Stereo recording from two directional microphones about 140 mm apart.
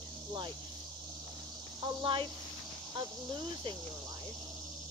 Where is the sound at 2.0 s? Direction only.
40° right (ahead or behind).